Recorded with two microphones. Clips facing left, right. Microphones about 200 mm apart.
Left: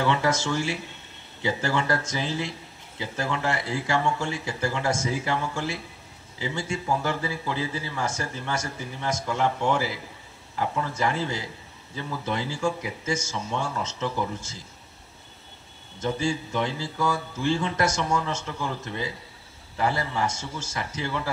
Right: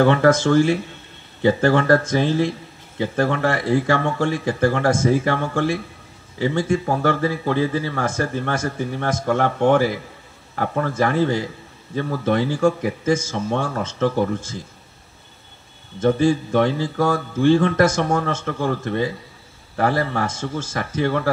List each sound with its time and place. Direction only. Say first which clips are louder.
0.0 s speech: right 9 dB; 55° right (ahead or behind)
16.0 s speech: right 10 dB; 55° right (ahead or behind)